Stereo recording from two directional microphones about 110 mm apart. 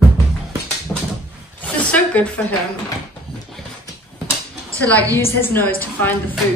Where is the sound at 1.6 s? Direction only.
15° left (ahead or behind).